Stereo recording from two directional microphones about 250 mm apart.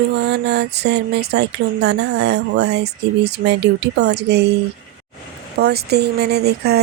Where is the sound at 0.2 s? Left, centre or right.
Right.